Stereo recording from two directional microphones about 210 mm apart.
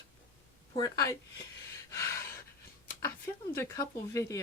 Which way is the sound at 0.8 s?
15° left (ahead or behind).